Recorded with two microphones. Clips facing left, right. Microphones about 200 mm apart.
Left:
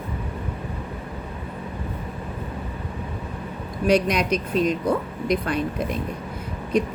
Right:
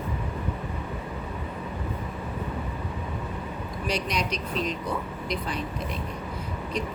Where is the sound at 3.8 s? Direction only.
50° left (ahead or behind).